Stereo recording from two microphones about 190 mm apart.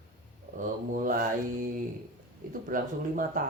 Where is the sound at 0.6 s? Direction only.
45° right (ahead or behind).